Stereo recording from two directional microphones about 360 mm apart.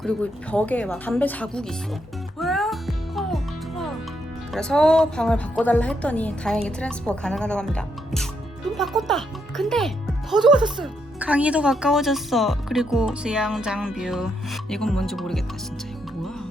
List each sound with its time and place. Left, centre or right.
0.0 s speech: centre
2.4 s music: centre
4.5 s a child's voice: centre